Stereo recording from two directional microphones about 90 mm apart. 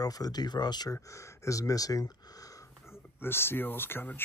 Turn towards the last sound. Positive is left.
turn(degrees=20)  # may be behind; listen again after turning